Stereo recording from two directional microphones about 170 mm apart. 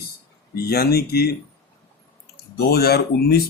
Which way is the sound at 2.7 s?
70° left (ahead or behind).